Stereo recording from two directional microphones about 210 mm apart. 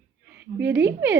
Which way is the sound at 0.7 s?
10° right (ahead or behind).